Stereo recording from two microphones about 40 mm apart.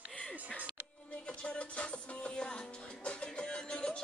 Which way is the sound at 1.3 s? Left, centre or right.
Left.